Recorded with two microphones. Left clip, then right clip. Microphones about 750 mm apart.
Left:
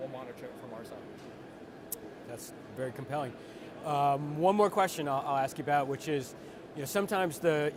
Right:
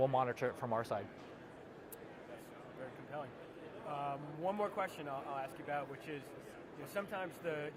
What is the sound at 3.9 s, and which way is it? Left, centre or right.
Speech, left.